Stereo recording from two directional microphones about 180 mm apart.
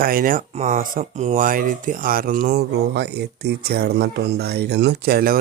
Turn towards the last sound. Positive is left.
turn(degrees=-60)  # may be behind; listen again after turning